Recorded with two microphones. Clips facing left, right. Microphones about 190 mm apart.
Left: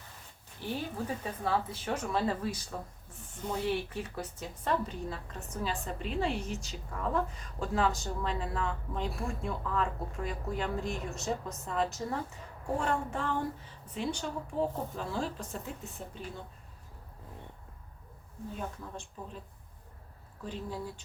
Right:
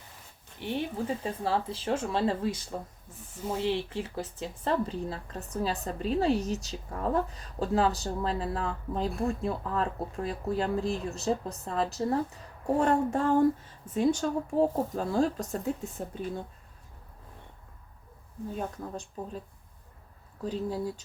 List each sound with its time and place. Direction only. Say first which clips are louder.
0.6 s speech: right 4 dB; 20° right (ahead or behind); by 16.1 s 45° right (ahead or behind)
18.8 s speech: right 6 dB; 40° right (ahead or behind)
20.4 s speech: right 7 dB; 40° right (ahead or behind)